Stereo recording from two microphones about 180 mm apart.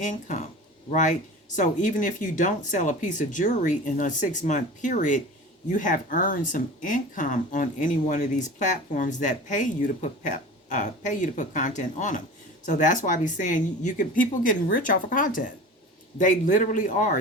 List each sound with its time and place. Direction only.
0.0 s speech: 45° left (ahead or behind)